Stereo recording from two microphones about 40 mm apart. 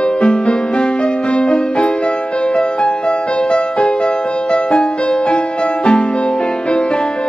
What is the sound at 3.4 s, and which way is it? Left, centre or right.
Music, left.